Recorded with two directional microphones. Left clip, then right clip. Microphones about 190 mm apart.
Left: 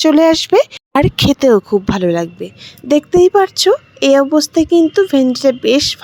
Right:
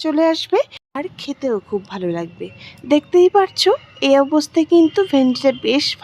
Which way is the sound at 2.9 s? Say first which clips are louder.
Left 3 dB; 20° left (ahead or behind).